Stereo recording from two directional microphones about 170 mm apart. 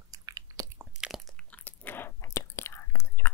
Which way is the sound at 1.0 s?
Centre (ahead or behind).